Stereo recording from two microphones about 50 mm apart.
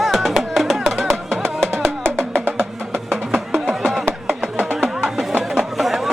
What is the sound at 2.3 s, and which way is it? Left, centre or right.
Music, right.